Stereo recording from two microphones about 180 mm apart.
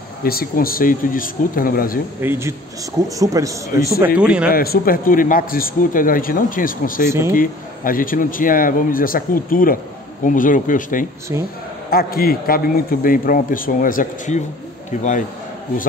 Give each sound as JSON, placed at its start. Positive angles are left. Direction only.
{"t": 0.2, "sound": "speech", "side_deg": 55}
{"t": 2.2, "sound": "a man's voice", "side_deg": -15}
{"t": 4.2, "sound": "speech", "side_deg": -5}
{"t": 4.5, "sound": "speech", "side_deg": 55}
{"t": 7.1, "sound": "speech", "side_deg": -15}
{"t": 7.3, "sound": "speech", "side_deg": 50}
{"t": 11.3, "sound": "speech", "side_deg": -15}
{"t": 11.9, "sound": "speech", "side_deg": 55}